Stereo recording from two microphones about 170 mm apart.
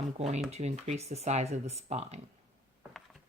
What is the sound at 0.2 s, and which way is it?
Speech, 40° right (ahead or behind).